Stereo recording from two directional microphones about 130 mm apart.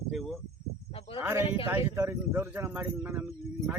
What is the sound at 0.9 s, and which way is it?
Cricket, 45° left (ahead or behind).